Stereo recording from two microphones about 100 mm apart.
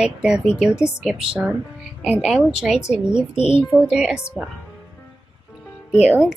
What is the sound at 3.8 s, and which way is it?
Speech, 10° right (ahead or behind).